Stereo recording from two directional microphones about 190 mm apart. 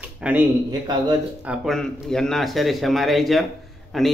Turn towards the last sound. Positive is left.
turn(degrees=0)  # may be behind; listen again after turning